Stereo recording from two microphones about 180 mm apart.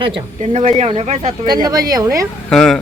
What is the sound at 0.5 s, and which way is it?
Speech, 40° right (ahead or behind).